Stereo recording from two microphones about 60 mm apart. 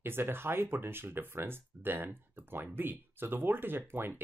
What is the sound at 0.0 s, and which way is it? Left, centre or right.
Speech, right.